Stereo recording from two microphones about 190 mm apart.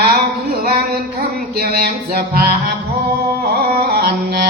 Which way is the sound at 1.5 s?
55° right (ahead or behind).